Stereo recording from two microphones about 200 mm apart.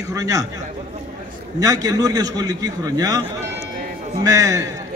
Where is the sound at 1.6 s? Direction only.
15° right (ahead or behind).